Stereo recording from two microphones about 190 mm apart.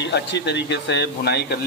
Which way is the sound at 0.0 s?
65° left (ahead or behind).